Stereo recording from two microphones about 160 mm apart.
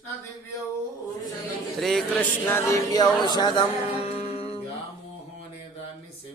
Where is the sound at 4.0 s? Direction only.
40° left (ahead or behind).